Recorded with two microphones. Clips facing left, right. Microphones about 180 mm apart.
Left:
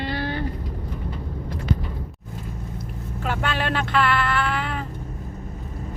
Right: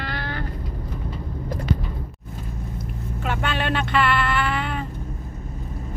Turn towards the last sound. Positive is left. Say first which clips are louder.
# right 1 dB
turn(degrees=0)  # may be behind; listen again after turning